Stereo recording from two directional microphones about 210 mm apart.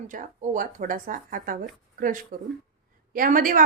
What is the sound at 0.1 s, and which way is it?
A woman's voice, 40° right (ahead or behind).